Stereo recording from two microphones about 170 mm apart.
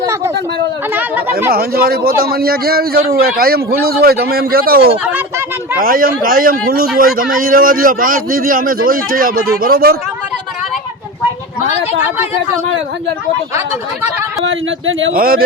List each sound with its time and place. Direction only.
0.9 s speech: 10° right (ahead or behind)
1.5 s a man's voice: 65° right (ahead or behind)
15.1 s a man's voice: 60° right (ahead or behind)